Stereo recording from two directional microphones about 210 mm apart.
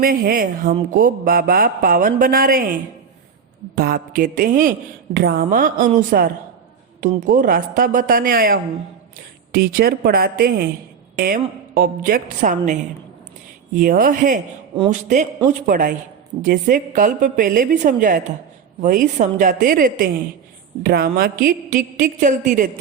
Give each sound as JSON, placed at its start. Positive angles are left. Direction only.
{"t": 0.0, "sound": "speech", "side_deg": -45}
{"t": 3.8, "sound": "a woman's voice", "side_deg": -45}